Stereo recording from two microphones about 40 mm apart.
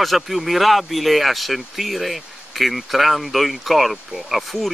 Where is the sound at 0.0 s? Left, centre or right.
Centre.